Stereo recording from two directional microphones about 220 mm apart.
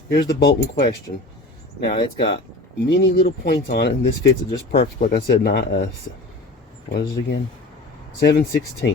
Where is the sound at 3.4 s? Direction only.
50° left (ahead or behind).